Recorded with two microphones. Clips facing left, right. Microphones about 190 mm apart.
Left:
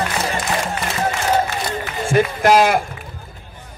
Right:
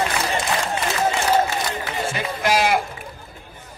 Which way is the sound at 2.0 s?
50° left (ahead or behind).